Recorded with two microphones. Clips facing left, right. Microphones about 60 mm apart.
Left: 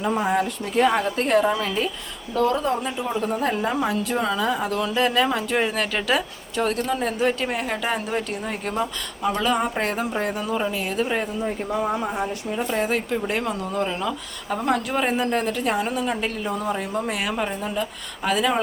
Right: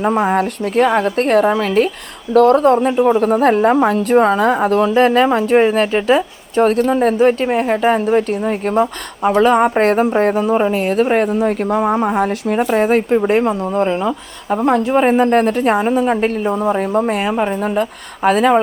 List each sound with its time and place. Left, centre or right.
0.0 s a woman's voice: right
6.6 s a woman's voice: right
12.7 s speech: right
17.6 s a woman's voice: right